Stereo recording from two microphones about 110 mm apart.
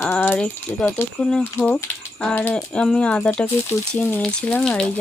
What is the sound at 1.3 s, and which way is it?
Speech, 5° left (ahead or behind).